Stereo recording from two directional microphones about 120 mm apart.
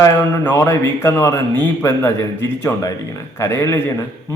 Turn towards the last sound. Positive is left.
turn(degrees=20)  # may be behind; listen again after turning